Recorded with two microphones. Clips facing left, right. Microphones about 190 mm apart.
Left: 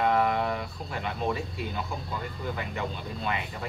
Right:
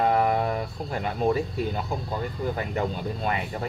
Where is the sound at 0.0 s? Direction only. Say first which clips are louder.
Right 3 dB; 40° right (ahead or behind).